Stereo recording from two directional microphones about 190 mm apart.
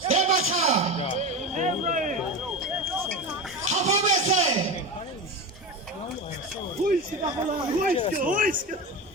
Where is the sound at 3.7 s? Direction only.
40° right (ahead or behind).